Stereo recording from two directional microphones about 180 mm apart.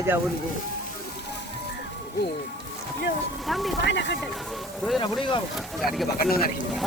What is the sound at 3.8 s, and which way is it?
Speech, 75° left (ahead or behind).